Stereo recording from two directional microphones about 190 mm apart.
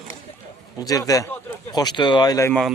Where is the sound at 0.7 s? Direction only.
20° left (ahead or behind).